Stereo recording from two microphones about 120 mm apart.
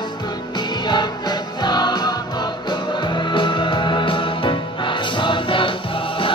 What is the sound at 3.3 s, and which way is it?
Music, 40° left (ahead or behind).